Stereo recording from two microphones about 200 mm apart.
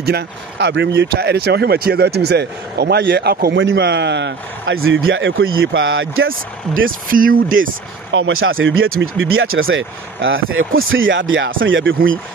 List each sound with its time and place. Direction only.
0.0 s a man's voice: 55° right (ahead or behind); by 6.3 s 80° right
6.9 s speech: 45° right (ahead or behind)
8.1 s a man's voice: 75° right (ahead or behind)